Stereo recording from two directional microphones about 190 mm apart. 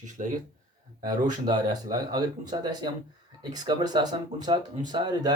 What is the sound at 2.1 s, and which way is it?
Speech, 20° right (ahead or behind).